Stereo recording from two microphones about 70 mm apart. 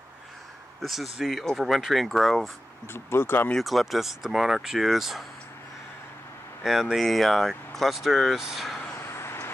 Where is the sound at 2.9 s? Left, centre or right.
Left.